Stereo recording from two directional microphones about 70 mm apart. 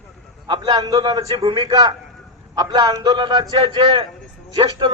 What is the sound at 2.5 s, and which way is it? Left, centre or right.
A man's voice, right.